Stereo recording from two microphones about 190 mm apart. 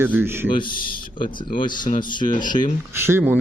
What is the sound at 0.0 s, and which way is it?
Speech, 10° right (ahead or behind).